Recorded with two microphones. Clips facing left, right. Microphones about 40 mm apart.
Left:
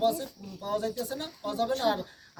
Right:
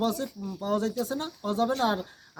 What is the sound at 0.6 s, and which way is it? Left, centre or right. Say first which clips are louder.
Speech: right 3 dB; right.